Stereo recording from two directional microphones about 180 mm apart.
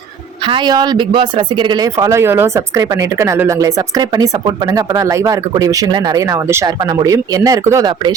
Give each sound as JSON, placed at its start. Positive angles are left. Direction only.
{"t": 0.4, "sound": "speech", "side_deg": -25}